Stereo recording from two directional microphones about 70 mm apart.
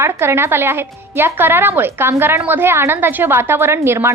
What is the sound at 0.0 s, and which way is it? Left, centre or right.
A woman's voice, right.